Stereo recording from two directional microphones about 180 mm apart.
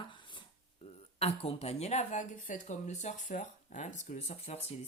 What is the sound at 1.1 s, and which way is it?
Speech, 35° left (ahead or behind).